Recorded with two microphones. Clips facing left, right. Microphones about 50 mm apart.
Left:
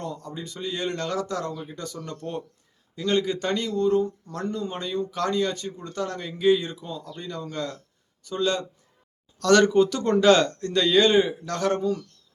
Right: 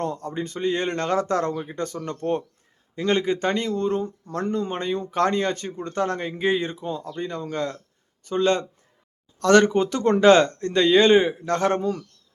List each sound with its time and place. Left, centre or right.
0.0 s speech: right